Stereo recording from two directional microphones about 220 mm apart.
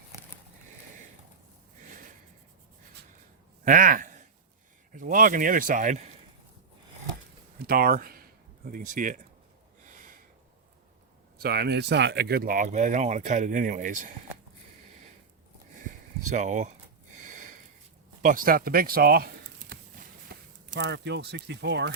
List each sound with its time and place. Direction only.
1.8 s snort: 35° right (ahead or behind)
3.6 s a sound: 35° right (ahead or behind)
4.9 s speech: 40° right (ahead or behind)
7.7 s speech: 40° right (ahead or behind)
9.8 s a sound: 35° right (ahead or behind)
11.4 s speech: 45° right (ahead or behind)
16.2 s speech: 35° right (ahead or behind)
17.2 s a sound: 35° right (ahead or behind)
20.7 s speech: 50° right (ahead or behind)